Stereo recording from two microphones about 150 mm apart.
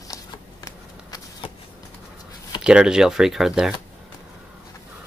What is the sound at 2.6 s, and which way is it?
Speech, 5° right (ahead or behind).